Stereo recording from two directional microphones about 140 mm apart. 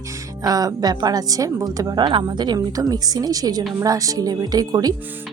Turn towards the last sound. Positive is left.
turn(degrees=-25)  # may be behind; listen again after turning